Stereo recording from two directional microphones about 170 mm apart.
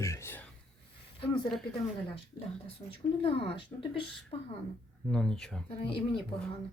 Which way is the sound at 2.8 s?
25° left (ahead or behind).